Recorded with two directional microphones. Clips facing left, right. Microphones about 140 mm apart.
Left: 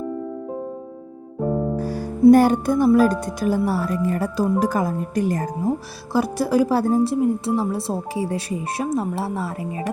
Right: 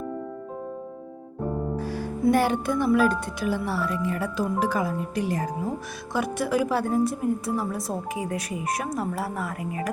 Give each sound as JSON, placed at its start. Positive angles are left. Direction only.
{"t": 2.3, "sound": "speech", "side_deg": 40}
{"t": 6.1, "sound": "a woman's voice", "side_deg": 35}